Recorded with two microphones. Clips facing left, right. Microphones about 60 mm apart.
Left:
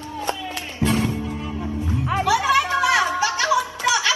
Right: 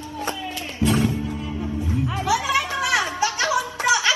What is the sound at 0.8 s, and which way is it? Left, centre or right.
Music, left.